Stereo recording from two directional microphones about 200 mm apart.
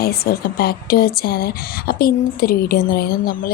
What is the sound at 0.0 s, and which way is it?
A woman's voice, 50° left (ahead or behind).